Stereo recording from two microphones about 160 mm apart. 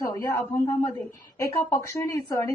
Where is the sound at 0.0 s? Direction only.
20° left (ahead or behind).